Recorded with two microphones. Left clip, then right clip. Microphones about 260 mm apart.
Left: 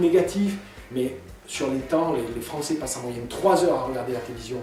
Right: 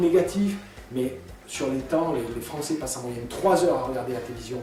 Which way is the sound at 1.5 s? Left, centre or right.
Centre.